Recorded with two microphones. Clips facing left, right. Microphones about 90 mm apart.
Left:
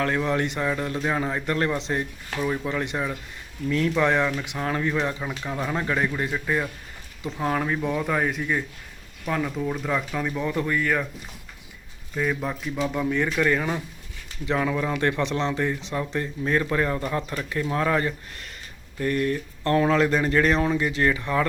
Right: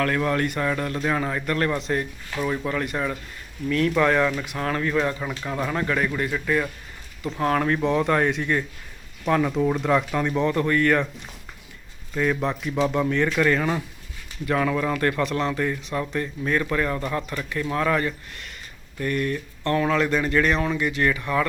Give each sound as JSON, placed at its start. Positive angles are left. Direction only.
{"t": 0.0, "sound": "speech", "side_deg": 20}
{"t": 5.2, "sound": "speech", "side_deg": 5}
{"t": 7.3, "sound": "speech", "side_deg": 5}
{"t": 9.8, "sound": "speech", "side_deg": 0}
{"t": 12.1, "sound": "speech", "side_deg": 5}